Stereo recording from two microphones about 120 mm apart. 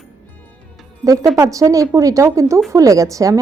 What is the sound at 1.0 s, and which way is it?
A woman's voice, 30° right (ahead or behind).